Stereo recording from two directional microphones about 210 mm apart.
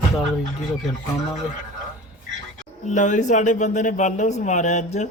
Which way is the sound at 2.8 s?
35° left (ahead or behind).